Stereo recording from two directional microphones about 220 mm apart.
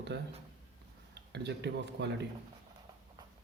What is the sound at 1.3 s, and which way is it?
Speech, 50° right (ahead or behind).